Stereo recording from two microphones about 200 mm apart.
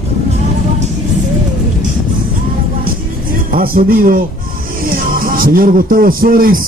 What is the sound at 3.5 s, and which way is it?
A man's voice, 45° right (ahead or behind).